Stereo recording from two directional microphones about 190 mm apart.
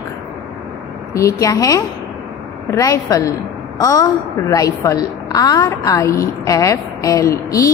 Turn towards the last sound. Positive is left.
turn(degrees=15)  # may be behind; listen again after turning